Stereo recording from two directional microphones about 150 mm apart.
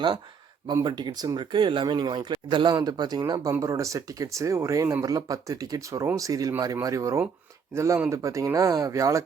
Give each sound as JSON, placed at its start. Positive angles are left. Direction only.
{"t": 0.7, "sound": "speech", "side_deg": -30}